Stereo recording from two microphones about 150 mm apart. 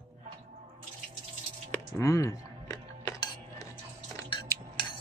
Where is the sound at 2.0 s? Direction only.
20° left (ahead or behind).